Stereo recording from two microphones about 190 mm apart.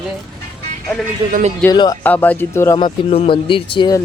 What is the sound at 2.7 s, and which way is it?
Speech, 30° left (ahead or behind).